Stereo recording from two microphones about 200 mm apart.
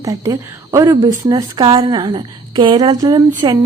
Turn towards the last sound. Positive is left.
turn(degrees=-20)  # may be behind; listen again after turning